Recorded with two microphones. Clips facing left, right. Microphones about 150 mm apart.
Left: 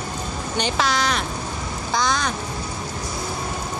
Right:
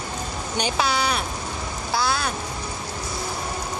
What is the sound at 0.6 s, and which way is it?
Speech, 10° right (ahead or behind).